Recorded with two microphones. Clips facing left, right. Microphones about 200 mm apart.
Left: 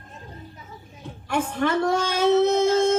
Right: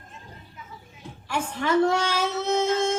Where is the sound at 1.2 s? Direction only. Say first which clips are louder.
Left 4 dB; 55° left (ahead or behind).